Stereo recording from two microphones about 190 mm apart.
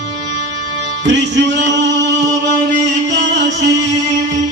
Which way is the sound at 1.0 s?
70° right (ahead or behind).